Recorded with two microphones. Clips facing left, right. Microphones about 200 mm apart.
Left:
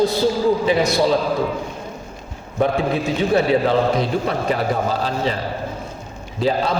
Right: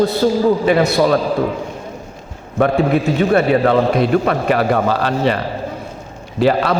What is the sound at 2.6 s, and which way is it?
A man's voice, 60° right (ahead or behind).